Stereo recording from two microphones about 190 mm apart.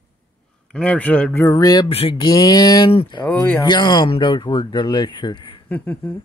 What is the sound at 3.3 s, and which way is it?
Speech, 10° left (ahead or behind).